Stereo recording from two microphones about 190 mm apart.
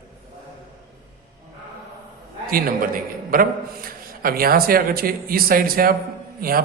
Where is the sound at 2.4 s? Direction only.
50° right (ahead or behind).